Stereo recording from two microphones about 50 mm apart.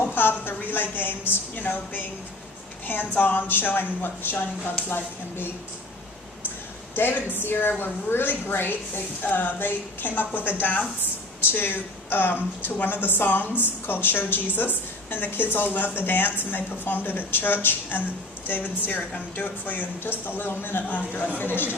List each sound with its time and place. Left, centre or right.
0.1 s a woman's voice: left
6.9 s a man's voice: left
20.8 s a woman's voice: left